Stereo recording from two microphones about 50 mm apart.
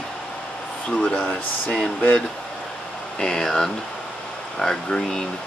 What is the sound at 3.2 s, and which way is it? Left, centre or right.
Speech, centre.